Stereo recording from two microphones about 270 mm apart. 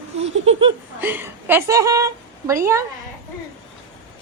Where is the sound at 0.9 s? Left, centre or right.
Centre.